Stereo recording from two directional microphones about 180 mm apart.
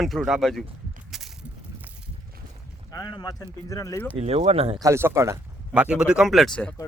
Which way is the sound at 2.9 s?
20° left (ahead or behind).